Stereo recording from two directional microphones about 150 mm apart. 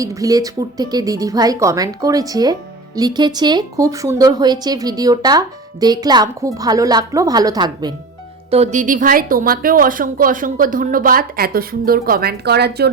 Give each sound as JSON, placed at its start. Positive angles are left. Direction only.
{"t": 0.0, "sound": "speech", "side_deg": -20}
{"t": 8.4, "sound": "a woman's voice", "side_deg": -45}